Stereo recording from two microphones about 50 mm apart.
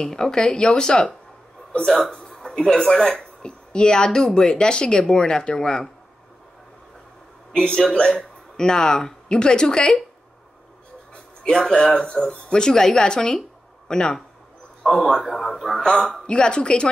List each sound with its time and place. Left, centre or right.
0.0 s a man's voice: centre
2.2 s speech: centre
7.5 s speech: centre
11.4 s speech: centre
14.8 s a man's voice: centre